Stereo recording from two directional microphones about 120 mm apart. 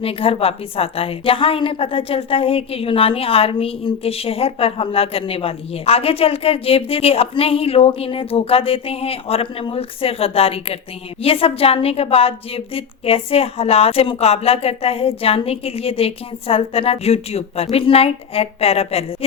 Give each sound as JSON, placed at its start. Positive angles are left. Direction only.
{"t": 0.0, "sound": "a woman's voice", "side_deg": 50}